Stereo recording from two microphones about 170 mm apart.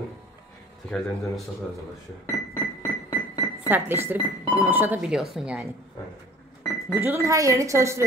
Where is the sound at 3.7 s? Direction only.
10° right (ahead or behind).